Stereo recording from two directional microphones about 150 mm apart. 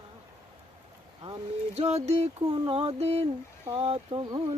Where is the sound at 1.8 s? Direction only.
45° right (ahead or behind).